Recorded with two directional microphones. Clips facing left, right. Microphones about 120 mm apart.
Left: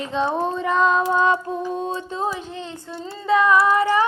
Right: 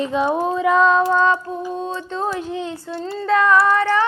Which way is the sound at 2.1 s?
5° left (ahead or behind).